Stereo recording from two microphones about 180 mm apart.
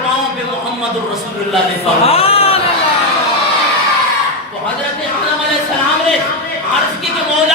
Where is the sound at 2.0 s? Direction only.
35° left (ahead or behind).